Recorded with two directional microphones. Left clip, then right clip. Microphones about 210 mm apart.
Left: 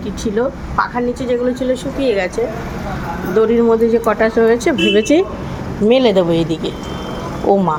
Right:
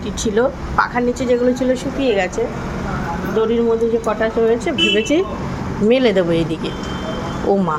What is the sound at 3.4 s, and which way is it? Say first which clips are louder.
A woman's voice: left 4 dB; 25° left (ahead or behind).